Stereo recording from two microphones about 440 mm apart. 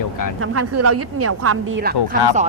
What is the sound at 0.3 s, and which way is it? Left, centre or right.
Speech, right.